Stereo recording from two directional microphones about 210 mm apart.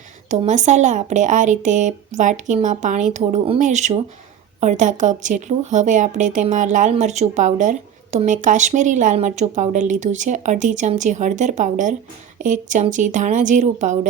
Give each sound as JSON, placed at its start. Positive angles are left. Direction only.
{"t": 0.3, "sound": "a woman's voice", "side_deg": -35}